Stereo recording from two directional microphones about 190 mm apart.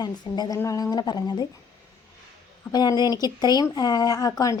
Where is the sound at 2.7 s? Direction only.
20° left (ahead or behind).